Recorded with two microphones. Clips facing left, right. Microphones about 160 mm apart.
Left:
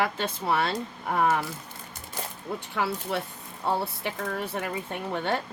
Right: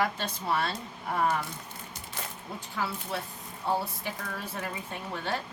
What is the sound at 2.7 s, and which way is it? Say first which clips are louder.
Speech: left 4 dB; 65° left (ahead or behind).